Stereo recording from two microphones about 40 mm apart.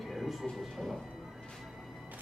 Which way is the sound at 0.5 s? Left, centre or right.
Centre.